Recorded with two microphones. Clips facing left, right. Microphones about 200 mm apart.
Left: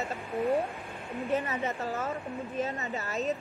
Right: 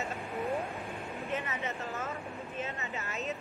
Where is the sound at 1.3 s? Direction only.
35° left (ahead or behind).